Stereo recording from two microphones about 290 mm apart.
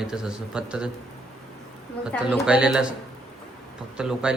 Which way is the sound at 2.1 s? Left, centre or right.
Centre.